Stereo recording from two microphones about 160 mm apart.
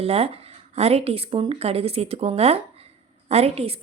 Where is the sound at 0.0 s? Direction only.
40° right (ahead or behind).